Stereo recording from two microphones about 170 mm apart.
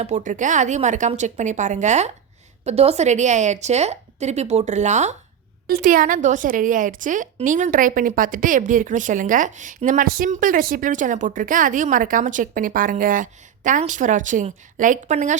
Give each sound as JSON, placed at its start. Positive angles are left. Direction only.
{"t": 0.0, "sound": "a woman's voice", "side_deg": -45}
{"t": 5.6, "sound": "a woman's voice", "side_deg": -55}